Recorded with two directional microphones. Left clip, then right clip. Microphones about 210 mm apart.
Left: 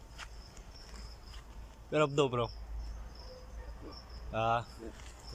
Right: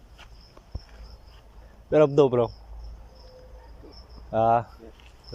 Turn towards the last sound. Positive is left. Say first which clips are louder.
# right 11 dB
turn(degrees=-25)  # may be behind; listen again after turning